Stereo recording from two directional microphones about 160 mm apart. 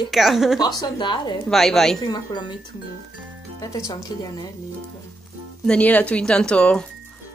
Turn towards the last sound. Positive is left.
turn(degrees=5)  # may be behind; listen again after turning